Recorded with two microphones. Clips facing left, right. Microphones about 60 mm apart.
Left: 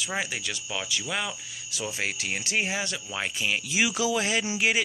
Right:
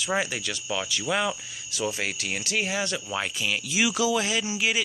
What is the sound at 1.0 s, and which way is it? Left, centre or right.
Speech, centre.